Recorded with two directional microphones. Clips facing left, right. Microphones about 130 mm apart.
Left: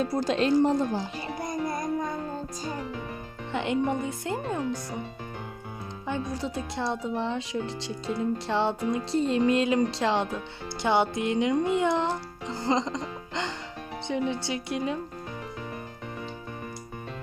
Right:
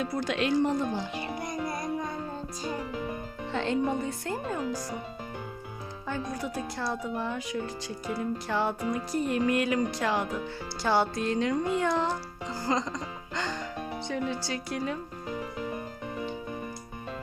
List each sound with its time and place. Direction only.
0.0 s speech: 35° left (ahead or behind)
3.5 s speech: 15° left (ahead or behind)
6.1 s speech: 25° left (ahead or behind)